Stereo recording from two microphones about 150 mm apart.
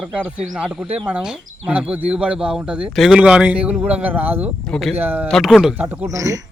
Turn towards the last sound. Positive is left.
turn(degrees=-20)  # may be behind; listen again after turning